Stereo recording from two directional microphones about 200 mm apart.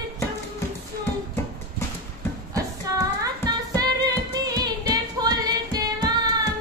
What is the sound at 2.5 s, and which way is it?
Female singing, 15° right (ahead or behind).